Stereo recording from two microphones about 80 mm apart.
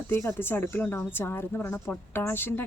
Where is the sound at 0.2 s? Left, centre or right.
Left.